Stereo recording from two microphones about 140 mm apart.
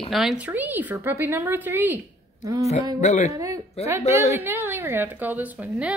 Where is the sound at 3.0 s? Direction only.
60° left (ahead or behind).